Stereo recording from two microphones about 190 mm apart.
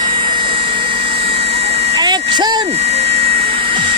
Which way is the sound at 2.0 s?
25° right (ahead or behind).